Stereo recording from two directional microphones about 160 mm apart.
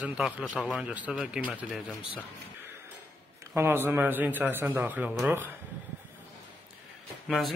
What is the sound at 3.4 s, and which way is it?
A man's voice, 15° right (ahead or behind).